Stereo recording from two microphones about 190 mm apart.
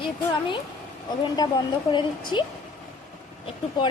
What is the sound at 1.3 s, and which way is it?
Speech, 20° left (ahead or behind).